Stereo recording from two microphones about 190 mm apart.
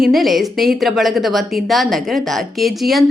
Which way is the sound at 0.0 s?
Centre (ahead or behind).